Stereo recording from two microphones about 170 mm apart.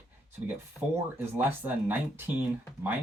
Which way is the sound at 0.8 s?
5° left (ahead or behind).